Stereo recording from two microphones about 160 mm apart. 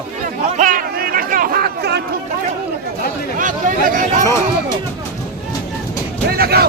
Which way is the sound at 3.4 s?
55° right (ahead or behind).